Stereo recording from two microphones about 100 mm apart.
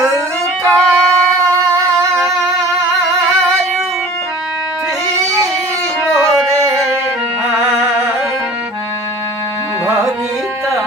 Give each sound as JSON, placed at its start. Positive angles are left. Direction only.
{"t": 0.7, "sound": "music", "side_deg": 5}
{"t": 7.4, "sound": "music", "side_deg": -15}